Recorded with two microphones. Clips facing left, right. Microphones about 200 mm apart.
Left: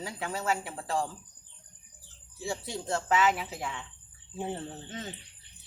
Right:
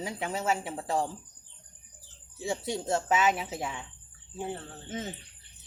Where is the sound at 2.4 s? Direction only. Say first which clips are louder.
Right 3 dB; 20° right (ahead or behind).